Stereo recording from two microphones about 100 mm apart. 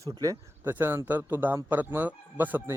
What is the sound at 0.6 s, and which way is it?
A man's voice, 20° right (ahead or behind).